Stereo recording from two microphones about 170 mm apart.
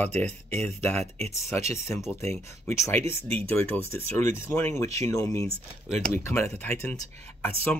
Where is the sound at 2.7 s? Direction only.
15° left (ahead or behind).